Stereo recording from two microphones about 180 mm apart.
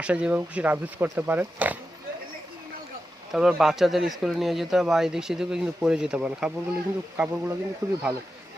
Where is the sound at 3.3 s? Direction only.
5° right (ahead or behind).